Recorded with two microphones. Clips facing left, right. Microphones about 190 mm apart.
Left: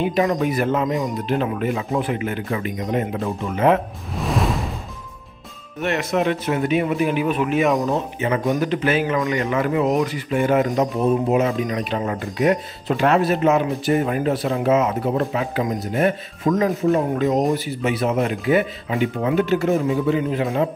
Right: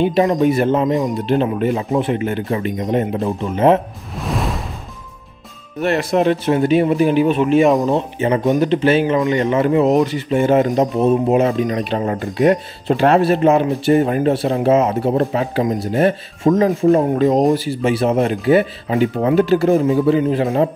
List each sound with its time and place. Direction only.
0.0 s speech: 30° right (ahead or behind)
4.1 s whoosh: centre (ahead or behind)
5.8 s speech: 35° right (ahead or behind)